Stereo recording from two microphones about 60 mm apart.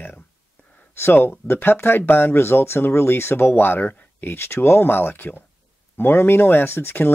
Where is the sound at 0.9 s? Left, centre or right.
Left.